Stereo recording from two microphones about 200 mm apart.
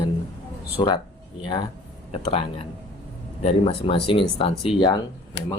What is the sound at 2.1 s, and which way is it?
Speech, 30° left (ahead or behind).